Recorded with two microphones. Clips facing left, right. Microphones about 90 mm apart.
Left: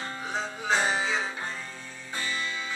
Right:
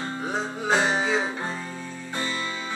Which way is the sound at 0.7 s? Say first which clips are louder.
Right 3 dB; 20° right (ahead or behind).